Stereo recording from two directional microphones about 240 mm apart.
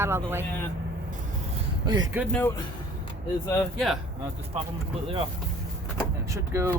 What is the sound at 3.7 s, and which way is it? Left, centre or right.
Speech, centre.